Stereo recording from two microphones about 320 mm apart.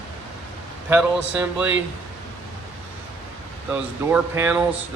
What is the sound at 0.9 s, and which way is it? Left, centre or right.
Speech, centre.